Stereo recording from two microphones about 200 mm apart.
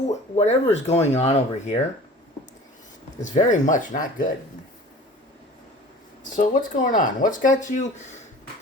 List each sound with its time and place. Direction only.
0.1 s speech: 35° left (ahead or behind)
3.3 s speech: 35° left (ahead or behind)
6.3 s speech: 40° left (ahead or behind)